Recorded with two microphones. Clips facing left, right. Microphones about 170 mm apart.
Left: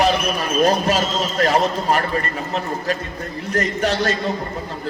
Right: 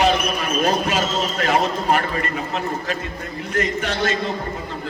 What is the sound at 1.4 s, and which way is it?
A man's voice, 40° left (ahead or behind).